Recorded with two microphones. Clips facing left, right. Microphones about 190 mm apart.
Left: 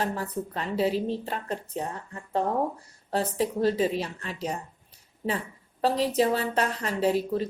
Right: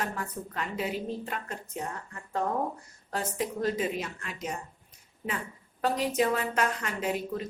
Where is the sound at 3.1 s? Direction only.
30° left (ahead or behind).